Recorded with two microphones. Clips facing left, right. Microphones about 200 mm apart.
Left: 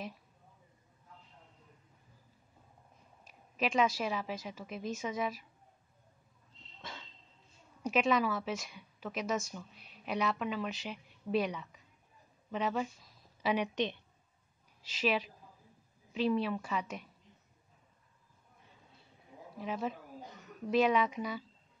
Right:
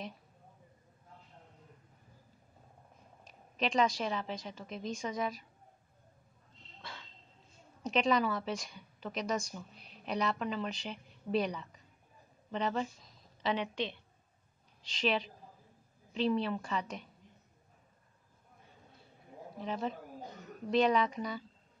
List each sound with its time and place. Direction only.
3.3 s a woman's voice: 5° left (ahead or behind)
6.8 s a sound: 20° left (ahead or behind)
7.8 s a woman's voice: 5° left (ahead or behind)
14.8 s a woman's voice: 5° left (ahead or behind)
19.6 s a woman's voice: 5° left (ahead or behind)